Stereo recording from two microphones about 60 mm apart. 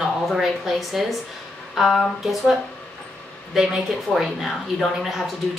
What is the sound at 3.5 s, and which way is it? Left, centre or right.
A woman's voice, centre.